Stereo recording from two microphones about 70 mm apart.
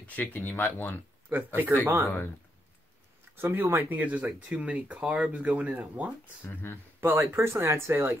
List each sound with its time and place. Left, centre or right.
0.0 s speech: left
1.3 s speech: right
3.3 s speech: right; by 6.1 s centre
6.4 s speech: left
7.0 s speech: right